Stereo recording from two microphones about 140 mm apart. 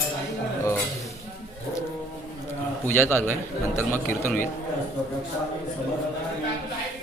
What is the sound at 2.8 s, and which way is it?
Speech, 15° left (ahead or behind).